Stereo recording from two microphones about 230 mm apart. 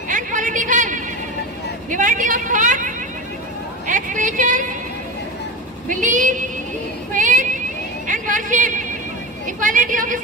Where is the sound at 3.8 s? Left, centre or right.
Right.